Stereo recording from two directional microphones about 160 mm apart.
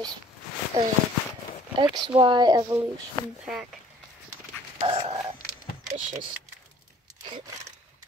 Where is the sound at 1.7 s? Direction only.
30° right (ahead or behind).